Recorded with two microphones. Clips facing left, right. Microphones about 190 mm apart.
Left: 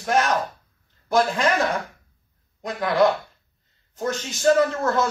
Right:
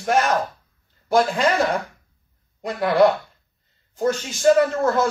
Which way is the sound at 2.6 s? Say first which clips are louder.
Right 3 dB; 10° right (ahead or behind).